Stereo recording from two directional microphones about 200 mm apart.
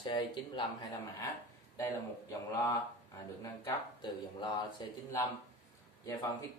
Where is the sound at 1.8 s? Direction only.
15° left (ahead or behind).